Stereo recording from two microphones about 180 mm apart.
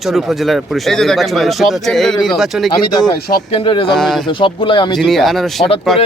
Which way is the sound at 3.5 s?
30° left (ahead or behind).